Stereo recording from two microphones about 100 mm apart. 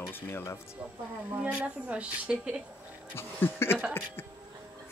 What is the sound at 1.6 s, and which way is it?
Speech, 10° right (ahead or behind).